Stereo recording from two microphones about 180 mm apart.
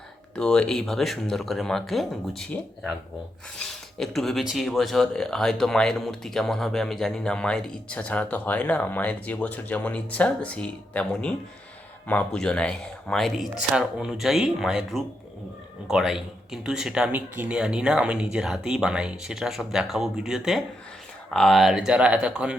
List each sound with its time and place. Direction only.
0.3 s speech: 5° left (ahead or behind)
3.6 s speech: centre (ahead or behind)